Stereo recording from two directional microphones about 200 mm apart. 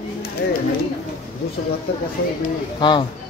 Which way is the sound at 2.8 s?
25° left (ahead or behind).